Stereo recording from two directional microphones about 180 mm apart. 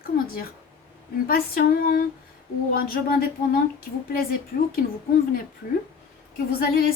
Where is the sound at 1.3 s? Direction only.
55° left (ahead or behind).